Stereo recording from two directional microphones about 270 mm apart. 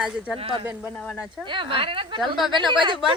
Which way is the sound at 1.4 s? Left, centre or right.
Centre.